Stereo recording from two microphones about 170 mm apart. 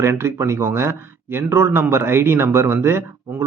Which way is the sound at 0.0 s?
15° right (ahead or behind).